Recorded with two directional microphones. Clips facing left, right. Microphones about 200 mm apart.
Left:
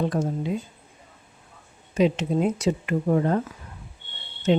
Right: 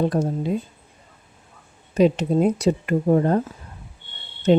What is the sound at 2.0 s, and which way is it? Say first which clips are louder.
Speech: right 4 dB; 35° right (ahead or behind).